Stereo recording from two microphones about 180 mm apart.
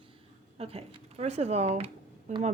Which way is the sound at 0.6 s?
35° right (ahead or behind).